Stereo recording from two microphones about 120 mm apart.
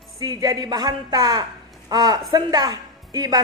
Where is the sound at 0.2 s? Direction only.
30° right (ahead or behind).